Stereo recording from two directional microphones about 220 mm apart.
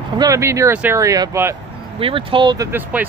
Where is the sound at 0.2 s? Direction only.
15° right (ahead or behind).